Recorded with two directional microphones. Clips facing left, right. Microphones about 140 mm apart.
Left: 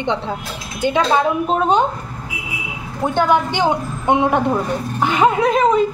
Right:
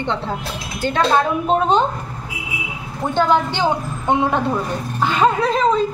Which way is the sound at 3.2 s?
15° left (ahead or behind).